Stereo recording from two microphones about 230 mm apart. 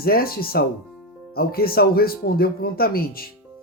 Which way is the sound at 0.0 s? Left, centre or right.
Left.